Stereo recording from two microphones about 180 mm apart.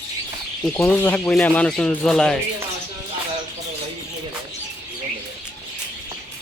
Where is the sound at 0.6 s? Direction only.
5° left (ahead or behind).